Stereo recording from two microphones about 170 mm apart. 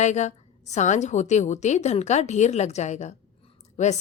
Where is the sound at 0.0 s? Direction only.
45° left (ahead or behind).